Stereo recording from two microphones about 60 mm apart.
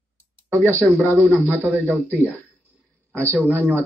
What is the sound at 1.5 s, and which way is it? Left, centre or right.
Speech, right.